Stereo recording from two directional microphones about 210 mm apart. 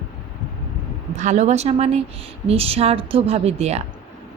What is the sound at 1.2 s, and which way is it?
Speech, 35° right (ahead or behind).